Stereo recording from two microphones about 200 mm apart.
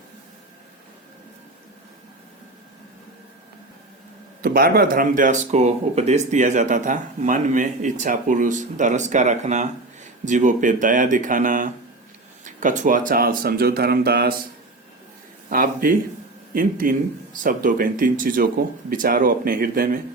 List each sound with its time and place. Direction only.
4.4 s speech: 45° right (ahead or behind)
15.4 s speech: 45° right (ahead or behind)